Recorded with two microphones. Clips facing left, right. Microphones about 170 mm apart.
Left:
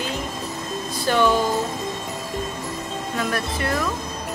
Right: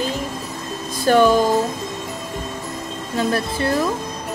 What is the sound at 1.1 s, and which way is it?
Music, 45° right (ahead or behind).